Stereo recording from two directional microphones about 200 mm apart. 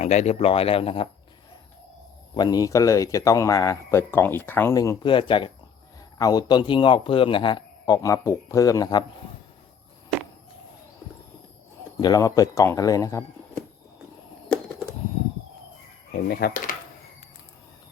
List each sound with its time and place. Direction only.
0.0 s a man's voice: 35° left (ahead or behind)
2.3 s a man's voice: 20° left (ahead or behind)
11.9 s speech: 20° left (ahead or behind)
16.1 s speech: 50° left (ahead or behind)